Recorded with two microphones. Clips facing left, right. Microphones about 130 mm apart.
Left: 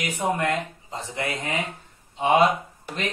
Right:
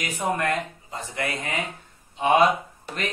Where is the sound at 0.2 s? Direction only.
15° left (ahead or behind).